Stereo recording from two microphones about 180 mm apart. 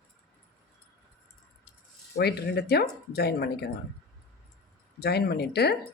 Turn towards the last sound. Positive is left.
turn(degrees=60)  # may be behind; listen again after turning